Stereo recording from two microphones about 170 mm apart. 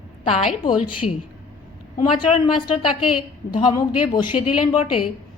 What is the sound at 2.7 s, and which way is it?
A woman's voice, 30° left (ahead or behind).